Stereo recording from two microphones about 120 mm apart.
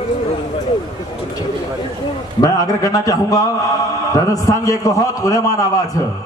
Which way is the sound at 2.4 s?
30° left (ahead or behind).